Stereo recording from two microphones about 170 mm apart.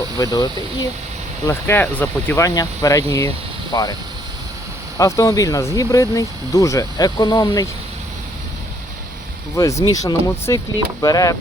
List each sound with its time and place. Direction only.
0.2 s speech: 20° left (ahead or behind)
4.9 s speech: 20° left (ahead or behind)
9.6 s speech: 20° left (ahead or behind)